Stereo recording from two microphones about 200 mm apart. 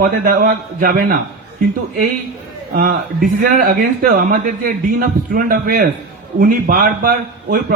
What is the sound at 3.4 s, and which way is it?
A man's voice, 50° right (ahead or behind).